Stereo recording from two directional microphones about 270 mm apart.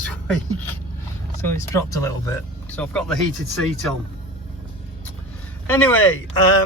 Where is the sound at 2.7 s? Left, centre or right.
Centre.